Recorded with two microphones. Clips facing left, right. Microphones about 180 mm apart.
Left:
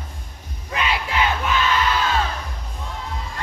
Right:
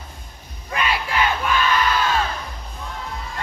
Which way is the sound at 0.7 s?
20° left (ahead or behind).